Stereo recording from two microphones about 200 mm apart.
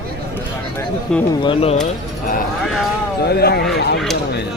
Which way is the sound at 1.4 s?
25° left (ahead or behind).